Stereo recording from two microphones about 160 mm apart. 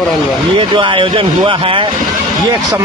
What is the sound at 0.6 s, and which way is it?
A man's voice, 30° right (ahead or behind).